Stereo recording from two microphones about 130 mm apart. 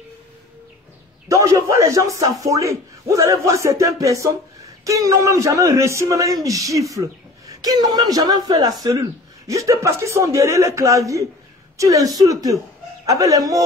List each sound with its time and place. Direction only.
1.3 s a man's voice: 25° right (ahead or behind)